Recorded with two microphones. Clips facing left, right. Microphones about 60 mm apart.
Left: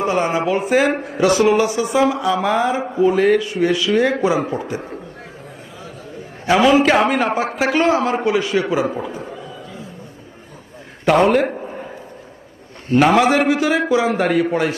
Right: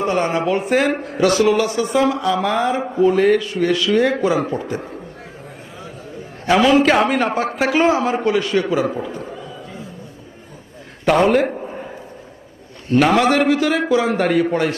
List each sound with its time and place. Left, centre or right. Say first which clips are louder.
0.0 s speech: even; centre
1.4 s speech: left 1 dB; left
1.6 s speech: left 1 dB; centre
6.4 s speech: even; centre
11.0 s a man's voice: left 1 dB; centre
11.5 s a sound: even; centre
12.9 s speech: left 1 dB; centre